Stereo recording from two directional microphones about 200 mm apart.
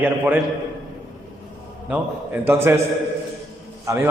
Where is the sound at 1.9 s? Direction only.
10° right (ahead or behind).